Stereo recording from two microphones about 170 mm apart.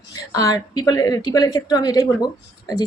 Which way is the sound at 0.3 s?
20° left (ahead or behind).